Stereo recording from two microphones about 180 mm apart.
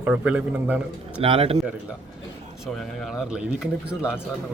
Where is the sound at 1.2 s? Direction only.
35° right (ahead or behind).